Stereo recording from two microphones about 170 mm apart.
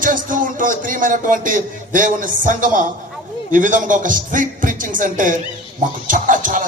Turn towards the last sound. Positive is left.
turn(degrees=-50)  # may be behind; listen again after turning